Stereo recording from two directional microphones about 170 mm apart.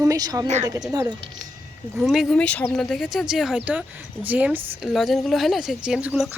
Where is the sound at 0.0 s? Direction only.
20° right (ahead or behind).